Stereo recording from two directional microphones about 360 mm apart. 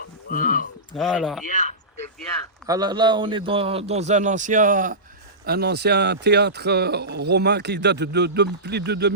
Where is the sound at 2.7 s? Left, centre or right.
Centre.